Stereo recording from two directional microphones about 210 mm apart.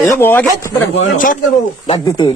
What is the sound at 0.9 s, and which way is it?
Speech, 40° left (ahead or behind).